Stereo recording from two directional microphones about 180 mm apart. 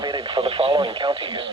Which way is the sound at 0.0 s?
25° right (ahead or behind).